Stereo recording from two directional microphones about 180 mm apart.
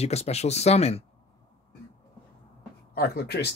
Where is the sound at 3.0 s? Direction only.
60° left (ahead or behind).